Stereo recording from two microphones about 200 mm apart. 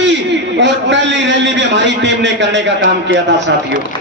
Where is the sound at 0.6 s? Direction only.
65° right (ahead or behind).